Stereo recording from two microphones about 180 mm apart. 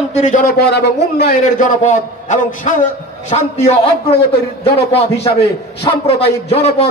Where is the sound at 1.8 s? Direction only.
40° left (ahead or behind).